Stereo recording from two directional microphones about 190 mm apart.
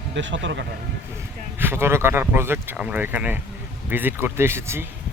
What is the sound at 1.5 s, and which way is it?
Speech, 10° right (ahead or behind).